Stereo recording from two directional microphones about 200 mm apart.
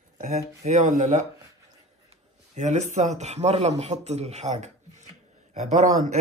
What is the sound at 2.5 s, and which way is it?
A man's voice, 35° right (ahead or behind).